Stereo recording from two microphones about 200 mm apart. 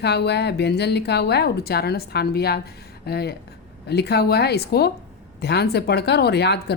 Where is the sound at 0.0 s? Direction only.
55° left (ahead or behind).